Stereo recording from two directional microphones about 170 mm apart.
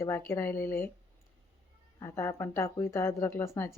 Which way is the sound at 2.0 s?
15° left (ahead or behind).